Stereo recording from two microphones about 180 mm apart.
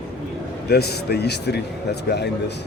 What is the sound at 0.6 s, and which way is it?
A man's voice, 65° left (ahead or behind).